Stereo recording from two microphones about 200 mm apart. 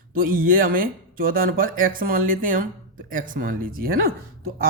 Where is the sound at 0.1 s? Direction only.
45° right (ahead or behind).